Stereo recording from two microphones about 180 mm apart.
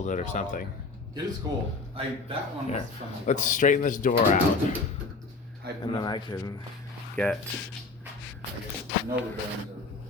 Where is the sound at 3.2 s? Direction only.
45° left (ahead or behind).